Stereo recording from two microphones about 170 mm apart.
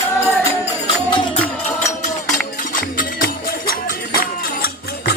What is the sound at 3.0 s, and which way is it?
Music, 60° left (ahead or behind).